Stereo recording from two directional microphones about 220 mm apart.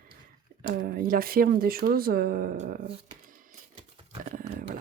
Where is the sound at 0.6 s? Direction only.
40° right (ahead or behind).